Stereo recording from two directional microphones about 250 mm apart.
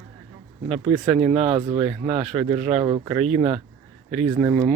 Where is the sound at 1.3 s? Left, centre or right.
Right.